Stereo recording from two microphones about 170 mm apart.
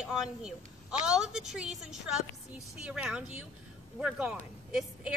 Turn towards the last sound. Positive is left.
turn(degrees=-5)  # may be behind; listen again after turning